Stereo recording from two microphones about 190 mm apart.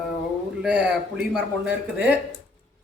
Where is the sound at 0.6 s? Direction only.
5° right (ahead or behind).